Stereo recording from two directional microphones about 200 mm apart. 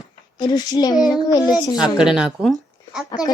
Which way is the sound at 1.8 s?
5° right (ahead or behind).